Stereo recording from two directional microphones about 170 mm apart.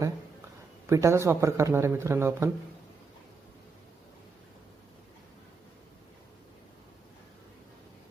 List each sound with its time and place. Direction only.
0.9 s speech: 15° right (ahead or behind)